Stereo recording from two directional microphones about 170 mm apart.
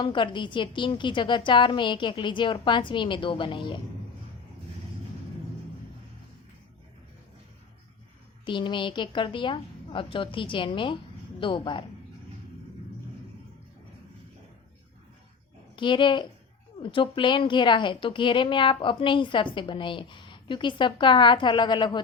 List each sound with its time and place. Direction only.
0.0 s a woman's voice: 30° left (ahead or behind)
8.4 s a woman's voice: 30° left (ahead or behind)
15.7 s a woman's voice: 30° left (ahead or behind)